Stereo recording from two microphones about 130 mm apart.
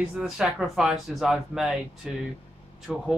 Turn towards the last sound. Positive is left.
turn(degrees=-5)  # may be behind; listen again after turning